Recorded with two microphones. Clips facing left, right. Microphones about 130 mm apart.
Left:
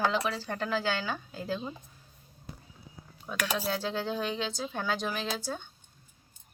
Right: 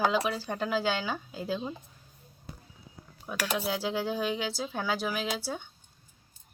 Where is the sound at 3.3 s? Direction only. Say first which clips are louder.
Even; 5° right (ahead or behind).